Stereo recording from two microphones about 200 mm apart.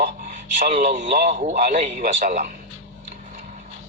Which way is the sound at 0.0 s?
45° right (ahead or behind).